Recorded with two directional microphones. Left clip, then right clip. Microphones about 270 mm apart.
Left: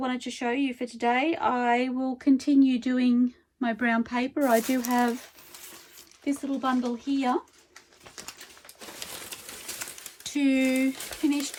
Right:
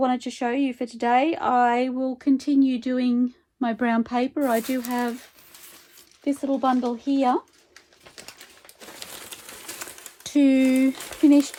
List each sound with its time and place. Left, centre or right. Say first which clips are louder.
0.0 s speech: right 6 dB; centre
6.2 s speech: right 6 dB; centre
9.0 s crushing: even; centre
10.2 s speech: right 5 dB; right